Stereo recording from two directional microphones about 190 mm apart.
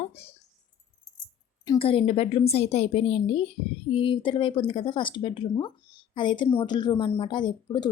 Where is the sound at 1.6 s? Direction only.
25° left (ahead or behind).